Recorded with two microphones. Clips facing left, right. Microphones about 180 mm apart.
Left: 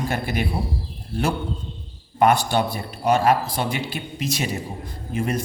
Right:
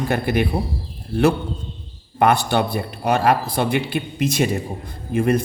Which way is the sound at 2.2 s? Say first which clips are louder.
Right 1 dB; 60° right (ahead or behind).